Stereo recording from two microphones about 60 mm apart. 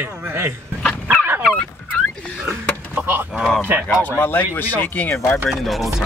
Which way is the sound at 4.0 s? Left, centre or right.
Left.